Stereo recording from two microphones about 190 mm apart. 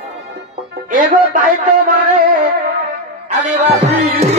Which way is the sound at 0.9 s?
45° right (ahead or behind).